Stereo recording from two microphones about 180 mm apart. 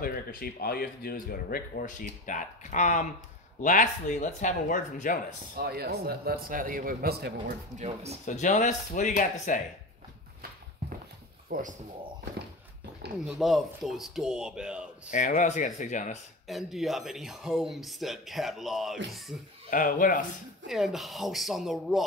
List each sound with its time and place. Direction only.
0.0 s speech: 55° left (ahead or behind)
5.6 s a man's voice: 60° right (ahead or behind)
7.7 s speech: 35° right (ahead or behind)
8.3 s speech: 45° left (ahead or behind)
11.4 s speech: 50° right (ahead or behind)
13.3 s speech: centre (ahead or behind)
15.0 s speech: 45° left (ahead or behind)
16.4 s speech: centre (ahead or behind)
19.7 s speech: 50° left (ahead or behind)
20.6 s speech: centre (ahead or behind)